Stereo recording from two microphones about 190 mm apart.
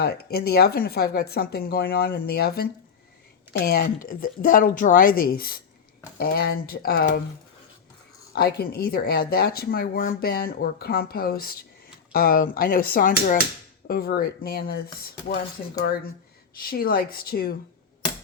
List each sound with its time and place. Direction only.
0.0 s speech: 55° left (ahead or behind)
8.4 s speech: 55° left (ahead or behind)
16.6 s speech: 50° left (ahead or behind)